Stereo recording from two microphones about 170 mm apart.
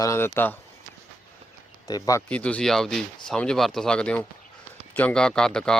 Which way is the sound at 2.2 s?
5° left (ahead or behind).